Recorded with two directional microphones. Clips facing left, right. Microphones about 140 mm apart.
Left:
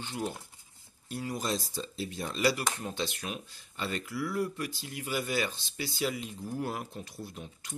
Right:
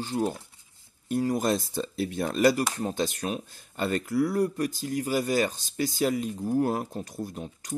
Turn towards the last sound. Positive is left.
turn(degrees=-40)  # may be behind; listen again after turning